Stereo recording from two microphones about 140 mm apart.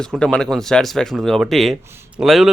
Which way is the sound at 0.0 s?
5° left (ahead or behind).